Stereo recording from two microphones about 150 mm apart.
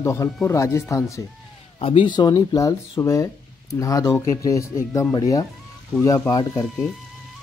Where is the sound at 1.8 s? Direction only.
35° left (ahead or behind).